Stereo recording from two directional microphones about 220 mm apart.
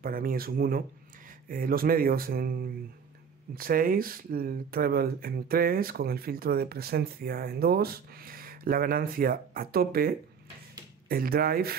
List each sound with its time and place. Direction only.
0.0 s speech: 40° right (ahead or behind)